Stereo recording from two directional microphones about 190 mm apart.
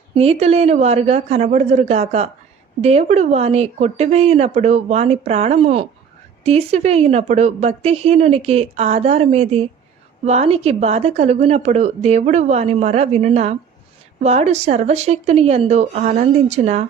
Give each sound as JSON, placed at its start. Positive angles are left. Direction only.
{"t": 0.1, "sound": "speech", "side_deg": -30}